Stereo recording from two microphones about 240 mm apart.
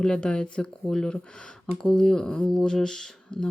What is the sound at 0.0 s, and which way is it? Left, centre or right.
Speech, centre.